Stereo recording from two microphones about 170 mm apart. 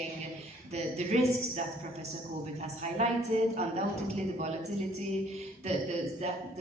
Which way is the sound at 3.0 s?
40° right (ahead or behind).